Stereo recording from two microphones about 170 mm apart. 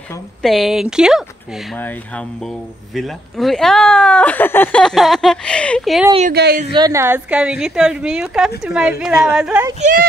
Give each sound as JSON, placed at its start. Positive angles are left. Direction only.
{"t": 0.4, "sound": "speech", "side_deg": 0}
{"t": 1.8, "sound": "speech", "side_deg": 10}
{"t": 6.3, "sound": "speech", "side_deg": -75}
{"t": 6.7, "sound": "speech", "side_deg": -20}